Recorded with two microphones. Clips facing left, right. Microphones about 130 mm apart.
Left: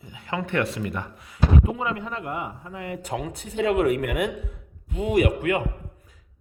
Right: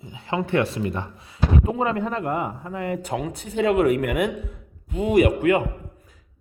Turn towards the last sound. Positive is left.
turn(degrees=-35)  # may be behind; listen again after turning